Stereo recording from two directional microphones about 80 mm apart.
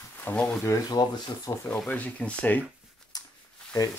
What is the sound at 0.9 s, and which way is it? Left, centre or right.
Speech, left.